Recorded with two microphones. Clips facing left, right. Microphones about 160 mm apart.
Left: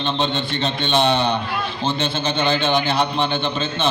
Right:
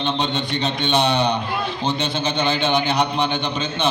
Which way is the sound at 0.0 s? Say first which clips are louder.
Left 1 dB; 15° right (ahead or behind).